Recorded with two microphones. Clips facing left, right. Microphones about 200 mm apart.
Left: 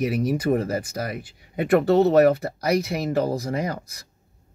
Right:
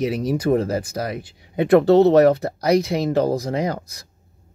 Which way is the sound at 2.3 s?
5° left (ahead or behind).